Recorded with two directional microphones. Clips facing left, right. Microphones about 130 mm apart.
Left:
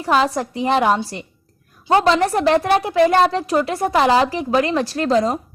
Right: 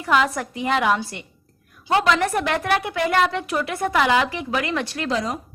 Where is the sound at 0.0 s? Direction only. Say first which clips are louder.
Left 3 dB; 30° left (ahead or behind).